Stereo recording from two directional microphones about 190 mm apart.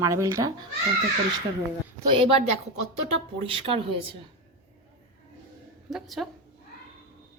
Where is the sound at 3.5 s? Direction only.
30° right (ahead or behind).